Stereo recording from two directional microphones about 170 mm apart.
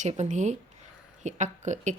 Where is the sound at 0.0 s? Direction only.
45° right (ahead or behind).